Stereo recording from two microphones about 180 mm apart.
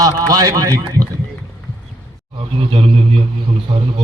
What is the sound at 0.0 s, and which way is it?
A man's voice, 20° right (ahead or behind).